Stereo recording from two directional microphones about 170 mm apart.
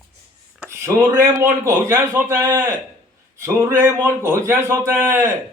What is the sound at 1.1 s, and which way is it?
A man's voice, 15° right (ahead or behind).